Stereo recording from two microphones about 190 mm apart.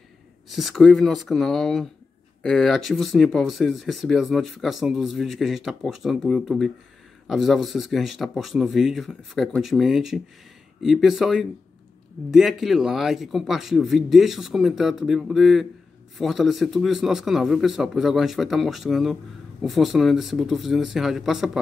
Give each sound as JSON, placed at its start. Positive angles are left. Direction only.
{"t": 0.5, "sound": "speech", "side_deg": 0}